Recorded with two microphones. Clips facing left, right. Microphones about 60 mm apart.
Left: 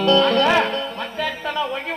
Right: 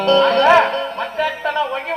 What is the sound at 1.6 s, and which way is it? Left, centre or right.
Speech, centre.